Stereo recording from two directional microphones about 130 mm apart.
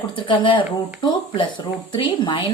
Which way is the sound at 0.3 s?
40° left (ahead or behind).